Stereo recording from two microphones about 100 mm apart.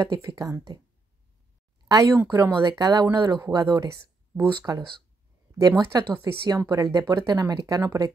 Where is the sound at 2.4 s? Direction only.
25° right (ahead or behind).